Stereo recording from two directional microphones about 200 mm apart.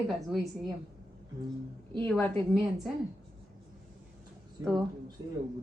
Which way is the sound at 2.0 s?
5° left (ahead or behind).